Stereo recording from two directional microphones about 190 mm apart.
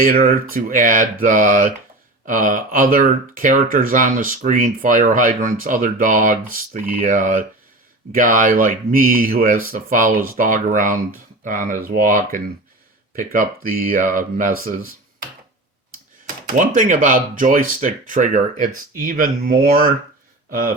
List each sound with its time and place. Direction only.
0.0 s speech: 50° right (ahead or behind)
13.4 s speech: 50° right (ahead or behind)
16.6 s speech: 45° right (ahead or behind)